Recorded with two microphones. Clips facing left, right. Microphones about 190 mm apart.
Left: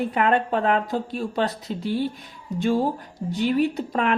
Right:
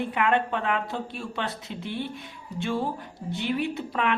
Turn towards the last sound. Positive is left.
turn(degrees=40)  # may be behind; listen again after turning